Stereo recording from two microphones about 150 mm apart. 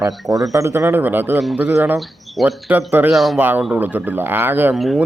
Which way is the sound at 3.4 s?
10° right (ahead or behind).